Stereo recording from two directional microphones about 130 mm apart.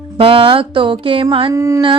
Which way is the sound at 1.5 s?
25° right (ahead or behind).